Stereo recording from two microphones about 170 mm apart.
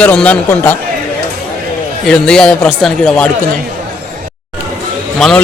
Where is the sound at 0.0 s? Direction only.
10° left (ahead or behind).